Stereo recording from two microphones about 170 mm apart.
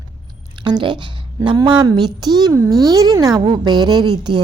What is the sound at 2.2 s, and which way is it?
A woman's voice, 25° right (ahead or behind).